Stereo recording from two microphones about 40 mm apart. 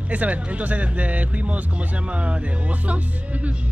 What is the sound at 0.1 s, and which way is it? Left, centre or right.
Speech, right.